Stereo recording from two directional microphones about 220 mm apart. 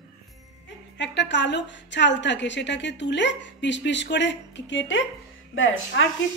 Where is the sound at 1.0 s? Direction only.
55° left (ahead or behind).